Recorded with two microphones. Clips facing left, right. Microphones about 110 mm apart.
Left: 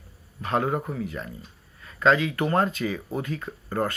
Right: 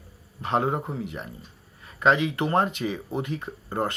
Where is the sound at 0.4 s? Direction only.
25° right (ahead or behind).